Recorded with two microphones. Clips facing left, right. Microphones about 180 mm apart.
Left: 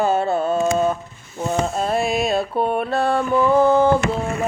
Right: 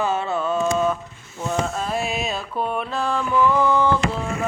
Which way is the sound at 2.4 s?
40° left (ahead or behind).